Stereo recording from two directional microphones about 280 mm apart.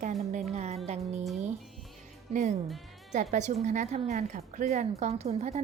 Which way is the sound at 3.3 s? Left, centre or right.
Right.